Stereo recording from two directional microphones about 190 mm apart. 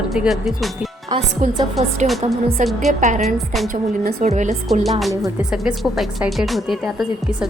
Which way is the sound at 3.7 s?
40° right (ahead or behind).